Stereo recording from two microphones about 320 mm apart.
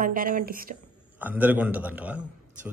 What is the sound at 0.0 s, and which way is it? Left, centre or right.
Speech, right.